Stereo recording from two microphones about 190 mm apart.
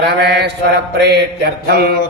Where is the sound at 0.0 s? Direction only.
60° right (ahead or behind).